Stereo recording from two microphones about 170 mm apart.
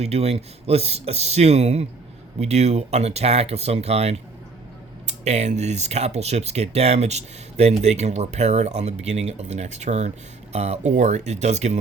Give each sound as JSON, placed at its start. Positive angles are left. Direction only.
{"t": 0.0, "sound": "speech", "side_deg": -40}